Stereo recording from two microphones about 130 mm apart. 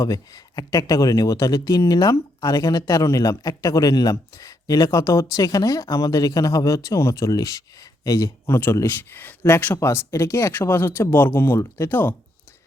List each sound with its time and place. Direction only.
0.0 s speech: 30° left (ahead or behind)